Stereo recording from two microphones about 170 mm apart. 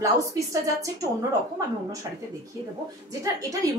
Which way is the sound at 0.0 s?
20° right (ahead or behind).